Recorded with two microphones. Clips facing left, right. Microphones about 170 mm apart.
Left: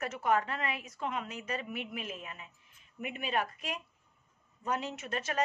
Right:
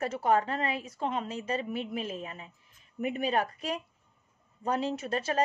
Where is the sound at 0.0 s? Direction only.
30° right (ahead or behind).